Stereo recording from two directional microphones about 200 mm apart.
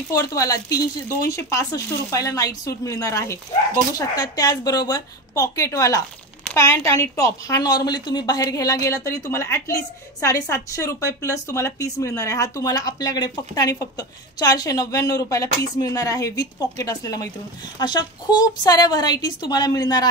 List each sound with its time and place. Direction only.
0.1 s a woman's voice: 15° left (ahead or behind)